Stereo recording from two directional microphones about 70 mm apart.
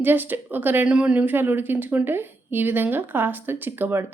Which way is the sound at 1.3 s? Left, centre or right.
Right.